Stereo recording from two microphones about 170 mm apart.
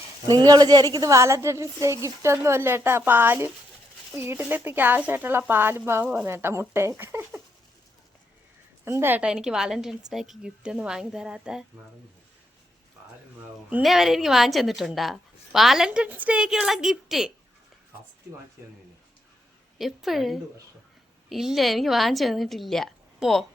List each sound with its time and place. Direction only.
0.3 s speech: 25° right (ahead or behind)
8.8 s a woman's voice: 15° right (ahead or behind)
13.7 s a woman's voice: 5° right (ahead or behind)
19.8 s a woman's voice: centre (ahead or behind)